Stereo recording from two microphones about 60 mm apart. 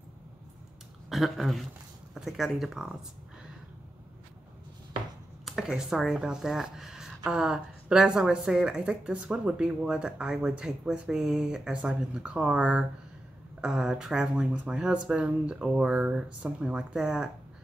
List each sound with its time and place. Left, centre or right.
1.1 s speech: centre
5.4 s speech: centre
11.7 s speech: right